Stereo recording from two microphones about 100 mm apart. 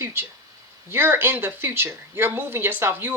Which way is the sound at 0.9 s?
20° right (ahead or behind).